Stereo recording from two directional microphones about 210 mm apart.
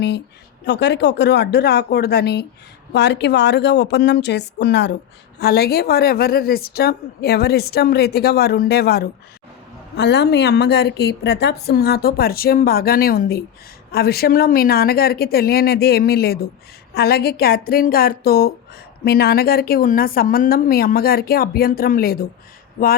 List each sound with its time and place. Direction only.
0.6 s a woman's voice: 55° left (ahead or behind)